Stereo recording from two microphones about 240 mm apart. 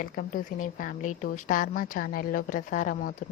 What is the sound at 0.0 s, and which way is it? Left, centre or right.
Speech, left.